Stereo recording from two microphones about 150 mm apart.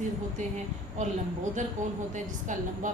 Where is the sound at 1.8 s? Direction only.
55° right (ahead or behind).